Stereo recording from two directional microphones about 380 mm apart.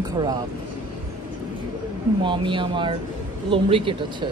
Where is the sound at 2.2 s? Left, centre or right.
Centre.